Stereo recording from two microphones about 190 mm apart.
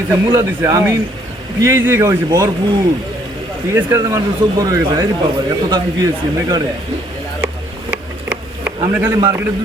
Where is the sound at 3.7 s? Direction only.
15° right (ahead or behind).